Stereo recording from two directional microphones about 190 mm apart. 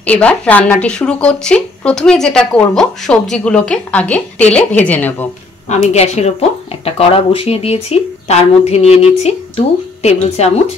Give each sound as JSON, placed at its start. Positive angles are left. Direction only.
{"t": 0.0, "sound": "speech", "side_deg": 5}
{"t": 5.7, "sound": "speech", "side_deg": 35}